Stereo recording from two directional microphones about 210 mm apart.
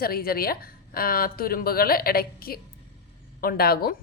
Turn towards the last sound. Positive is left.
turn(degrees=45)  # may be behind; listen again after turning